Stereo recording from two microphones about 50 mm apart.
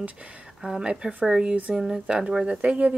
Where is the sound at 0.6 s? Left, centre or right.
Centre.